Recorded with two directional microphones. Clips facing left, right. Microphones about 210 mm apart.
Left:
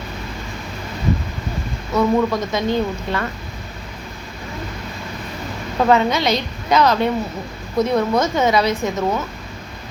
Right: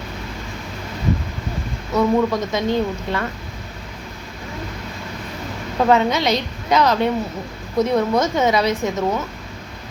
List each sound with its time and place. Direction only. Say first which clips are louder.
1.9 s a woman's voice: even; 20° right (ahead or behind)
5.8 s a woman's voice: even; 20° right (ahead or behind)